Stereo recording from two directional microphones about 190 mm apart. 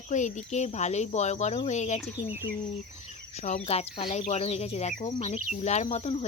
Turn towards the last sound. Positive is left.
turn(degrees=35)  # may be behind; listen again after turning